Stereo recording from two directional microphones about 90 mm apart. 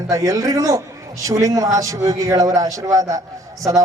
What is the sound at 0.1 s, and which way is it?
A man's voice, 35° right (ahead or behind).